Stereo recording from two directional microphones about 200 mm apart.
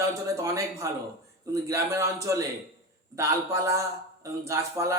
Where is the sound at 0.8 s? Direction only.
15° right (ahead or behind).